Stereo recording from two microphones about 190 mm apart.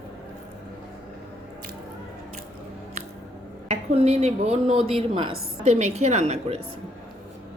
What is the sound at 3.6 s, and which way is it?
Speech, 35° right (ahead or behind).